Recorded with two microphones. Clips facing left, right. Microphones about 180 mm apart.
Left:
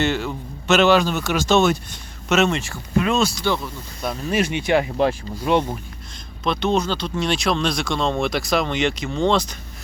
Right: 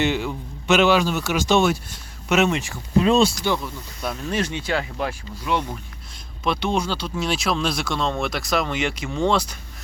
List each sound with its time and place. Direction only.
0.0 s a man's voice: 15° right (ahead or behind)
3.0 s speech: 30° right (ahead or behind)
4.0 s speech: centre (ahead or behind)
4.3 s speech: 10° left (ahead or behind); by 5.7 s 30° left (ahead or behind)
6.4 s a man's voice: 10° right (ahead or behind)